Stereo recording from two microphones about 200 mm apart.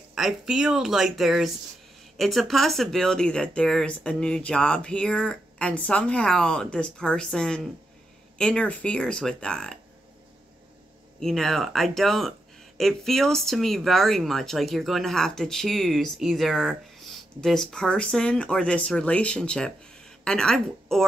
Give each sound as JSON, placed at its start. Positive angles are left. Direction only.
{"t": 0.1, "sound": "speech", "side_deg": 0}
{"t": 11.1, "sound": "speech", "side_deg": 0}